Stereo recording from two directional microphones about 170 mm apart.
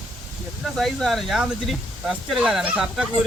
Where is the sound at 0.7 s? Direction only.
Centre (ahead or behind).